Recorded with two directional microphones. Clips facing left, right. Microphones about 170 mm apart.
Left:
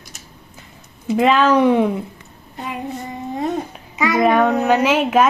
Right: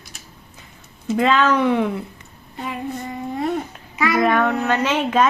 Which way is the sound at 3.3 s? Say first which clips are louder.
Left 1 dB; 20° left (ahead or behind).